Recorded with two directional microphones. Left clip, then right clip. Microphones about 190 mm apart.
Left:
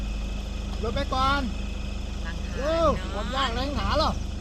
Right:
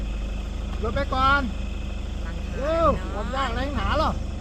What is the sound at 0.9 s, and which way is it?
Speech, 10° left (ahead or behind).